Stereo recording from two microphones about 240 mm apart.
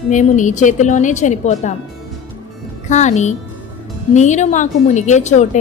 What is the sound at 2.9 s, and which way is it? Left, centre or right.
A woman's voice, left.